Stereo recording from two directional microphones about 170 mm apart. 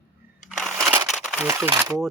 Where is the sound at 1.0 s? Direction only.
Centre (ahead or behind).